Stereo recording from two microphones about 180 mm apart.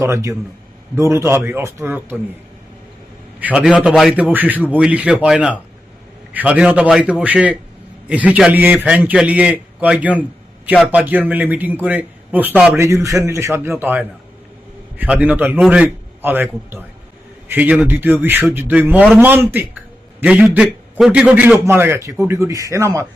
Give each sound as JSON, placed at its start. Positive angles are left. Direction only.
{"t": 0.0, "sound": "a man's voice", "side_deg": -15}
{"t": 3.4, "sound": "a man's voice", "side_deg": -5}